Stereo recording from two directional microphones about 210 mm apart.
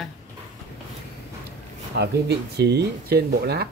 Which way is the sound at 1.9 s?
55° right (ahead or behind).